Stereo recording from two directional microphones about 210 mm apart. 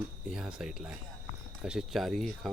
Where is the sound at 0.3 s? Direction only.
5° right (ahead or behind).